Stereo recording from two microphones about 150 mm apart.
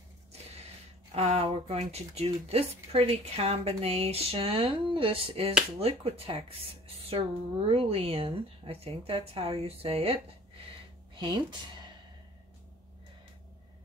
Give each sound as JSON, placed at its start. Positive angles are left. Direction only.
{"t": 1.1, "sound": "speech", "side_deg": -45}
{"t": 11.1, "sound": "speech", "side_deg": -30}